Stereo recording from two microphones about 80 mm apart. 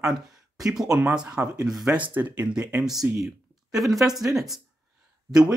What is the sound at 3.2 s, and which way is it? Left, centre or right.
Speech, centre.